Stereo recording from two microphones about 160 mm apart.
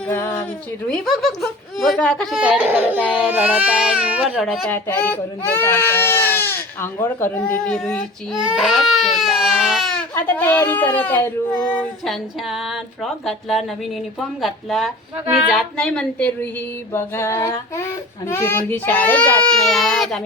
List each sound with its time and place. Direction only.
0.1 s speech: 15° left (ahead or behind)
0.9 s speech: centre (ahead or behind)
2.3 s speech: 5° right (ahead or behind); by 12.1 s 10° left (ahead or behind)
12.5 s speech: centre (ahead or behind)